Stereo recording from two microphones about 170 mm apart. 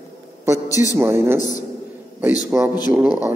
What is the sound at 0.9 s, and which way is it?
Speech, 15° right (ahead or behind).